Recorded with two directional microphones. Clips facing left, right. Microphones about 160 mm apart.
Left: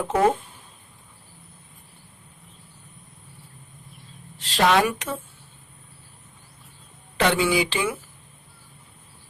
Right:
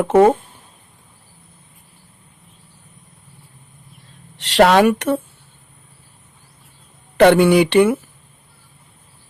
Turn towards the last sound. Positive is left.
turn(degrees=-65)  # may be behind; listen again after turning